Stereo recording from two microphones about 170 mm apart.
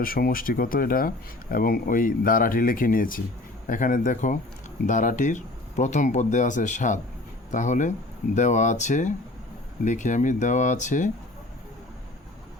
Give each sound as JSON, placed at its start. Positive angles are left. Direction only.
{"t": 0.0, "sound": "speech", "side_deg": 60}